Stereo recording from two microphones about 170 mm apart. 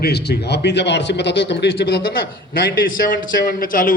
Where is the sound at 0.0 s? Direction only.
75° left (ahead or behind); by 1.9 s 90° left.